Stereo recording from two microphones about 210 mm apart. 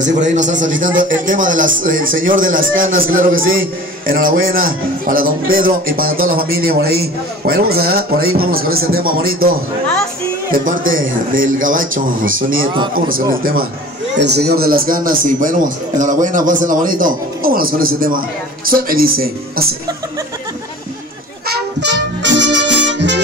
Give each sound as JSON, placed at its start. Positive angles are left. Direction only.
{"t": 0.0, "sound": "a man's voice", "side_deg": -35}
{"t": 10.5, "sound": "a man's voice", "side_deg": -40}
{"t": 12.6, "sound": "a man's voice", "side_deg": -20}
{"t": 13.3, "sound": "a man's voice", "side_deg": -45}
{"t": 14.1, "sound": "a man's voice", "side_deg": -55}
{"t": 21.5, "sound": "music", "side_deg": -55}